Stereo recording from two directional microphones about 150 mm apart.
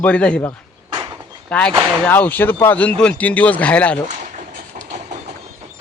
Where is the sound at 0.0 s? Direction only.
10° left (ahead or behind).